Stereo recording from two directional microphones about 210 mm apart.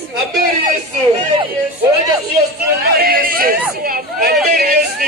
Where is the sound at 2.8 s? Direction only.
45° right (ahead or behind).